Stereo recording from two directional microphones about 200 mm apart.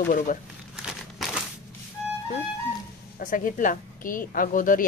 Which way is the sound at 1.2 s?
Centre (ahead or behind).